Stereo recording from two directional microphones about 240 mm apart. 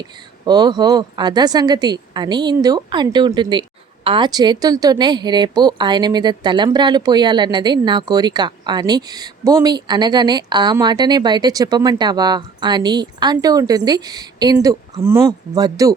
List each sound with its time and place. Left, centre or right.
0.0 s a woman's voice: centre